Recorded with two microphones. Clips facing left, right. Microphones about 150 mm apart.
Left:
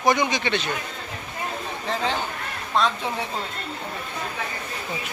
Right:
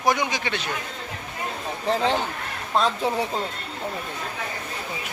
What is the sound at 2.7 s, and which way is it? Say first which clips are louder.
Speech: right 2 dB; 40° right (ahead or behind).